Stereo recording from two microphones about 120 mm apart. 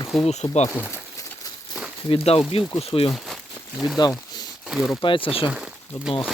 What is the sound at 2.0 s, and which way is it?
Speech, 55° left (ahead or behind).